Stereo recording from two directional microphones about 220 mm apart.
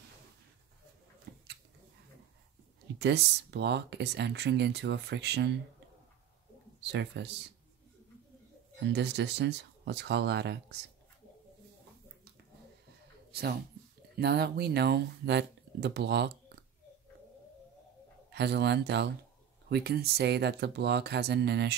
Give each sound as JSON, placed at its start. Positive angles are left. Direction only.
{"t": 1.3, "sound": "a sound", "side_deg": -45}
{"t": 3.0, "sound": "speech", "side_deg": -50}
{"t": 6.8, "sound": "speech", "side_deg": -50}
{"t": 8.7, "sound": "speech", "side_deg": -50}
{"t": 14.1, "sound": "speech", "side_deg": -45}
{"t": 18.3, "sound": "speech", "side_deg": -50}